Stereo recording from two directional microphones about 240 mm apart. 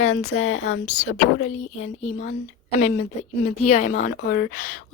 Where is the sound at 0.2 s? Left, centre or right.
Left.